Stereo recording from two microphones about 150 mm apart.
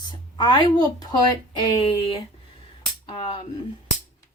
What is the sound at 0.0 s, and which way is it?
A woman's voice, 30° left (ahead or behind).